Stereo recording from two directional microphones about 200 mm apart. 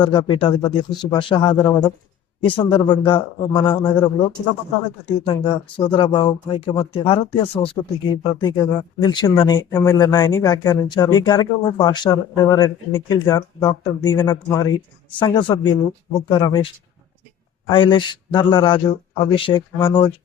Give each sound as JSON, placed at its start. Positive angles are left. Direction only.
{"t": 0.0, "sound": "speech", "side_deg": 25}
{"t": 17.7, "sound": "speech", "side_deg": 25}